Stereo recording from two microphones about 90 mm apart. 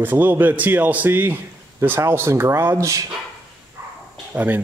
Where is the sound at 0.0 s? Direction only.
20° right (ahead or behind).